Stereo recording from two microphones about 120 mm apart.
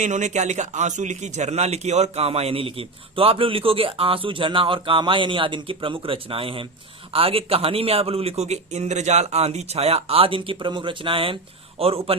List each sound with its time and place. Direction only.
0.0 s a man's voice: 90° right; by 12.1 s 55° right (ahead or behind)